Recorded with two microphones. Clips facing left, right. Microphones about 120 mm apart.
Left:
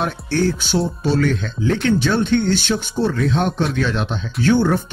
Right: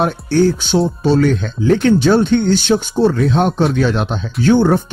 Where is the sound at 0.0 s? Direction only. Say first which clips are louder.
Right 6 dB; 30° right (ahead or behind).